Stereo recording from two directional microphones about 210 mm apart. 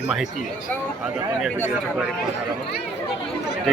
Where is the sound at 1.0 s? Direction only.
Centre (ahead or behind).